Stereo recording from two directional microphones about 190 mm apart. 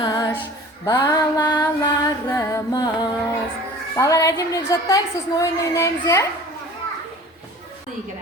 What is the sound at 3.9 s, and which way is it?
A woman's voice, 15° left (ahead or behind).